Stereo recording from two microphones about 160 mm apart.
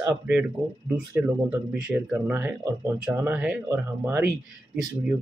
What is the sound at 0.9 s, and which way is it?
Speech, 10° right (ahead or behind).